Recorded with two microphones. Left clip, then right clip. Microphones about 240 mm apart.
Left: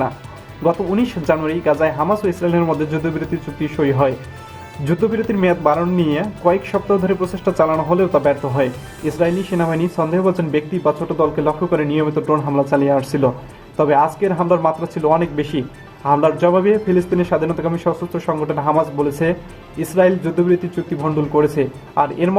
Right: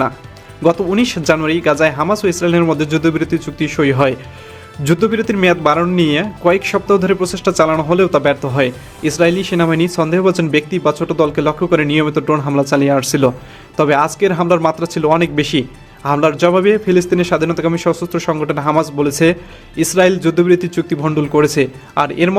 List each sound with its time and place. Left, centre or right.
0.6 s speech: right